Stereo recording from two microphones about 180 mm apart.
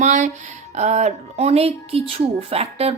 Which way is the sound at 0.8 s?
40° right (ahead or behind).